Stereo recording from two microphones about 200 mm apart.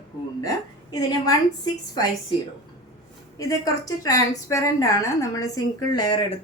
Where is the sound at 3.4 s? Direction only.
15° left (ahead or behind).